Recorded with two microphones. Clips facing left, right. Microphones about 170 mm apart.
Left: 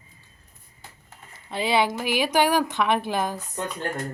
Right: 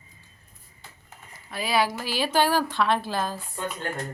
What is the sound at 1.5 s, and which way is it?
A woman's voice, 25° left (ahead or behind).